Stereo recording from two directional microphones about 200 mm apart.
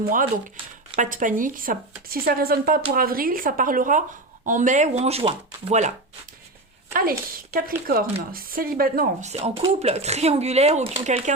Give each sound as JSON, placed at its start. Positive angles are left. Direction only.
{"t": 0.9, "sound": "a woman's voice", "side_deg": -40}
{"t": 6.9, "sound": "a woman's voice", "side_deg": -45}
{"t": 9.3, "sound": "speech", "side_deg": -30}